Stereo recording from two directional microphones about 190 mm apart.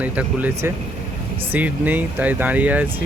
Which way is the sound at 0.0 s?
10° right (ahead or behind).